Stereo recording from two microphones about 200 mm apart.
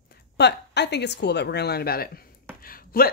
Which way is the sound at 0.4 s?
55° left (ahead or behind).